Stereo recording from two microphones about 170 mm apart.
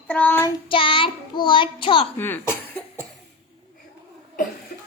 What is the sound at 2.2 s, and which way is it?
Speech, 10° left (ahead or behind).